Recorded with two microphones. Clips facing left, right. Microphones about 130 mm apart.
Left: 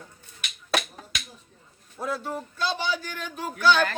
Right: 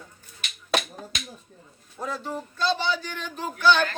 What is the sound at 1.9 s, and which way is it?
Speech, 5° left (ahead or behind).